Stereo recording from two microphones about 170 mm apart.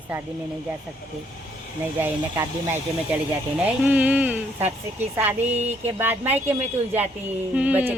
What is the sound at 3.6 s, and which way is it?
Speech, 10° right (ahead or behind).